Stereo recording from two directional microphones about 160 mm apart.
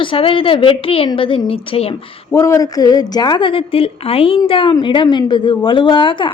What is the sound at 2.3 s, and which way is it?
A woman's voice, 20° left (ahead or behind).